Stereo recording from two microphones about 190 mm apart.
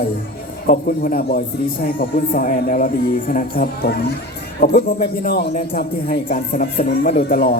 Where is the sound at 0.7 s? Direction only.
50° left (ahead or behind).